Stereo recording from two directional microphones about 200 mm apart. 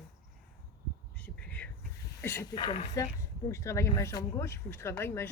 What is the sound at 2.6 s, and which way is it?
Speech, 30° left (ahead or behind).